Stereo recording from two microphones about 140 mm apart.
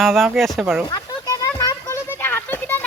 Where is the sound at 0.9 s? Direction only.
25° left (ahead or behind).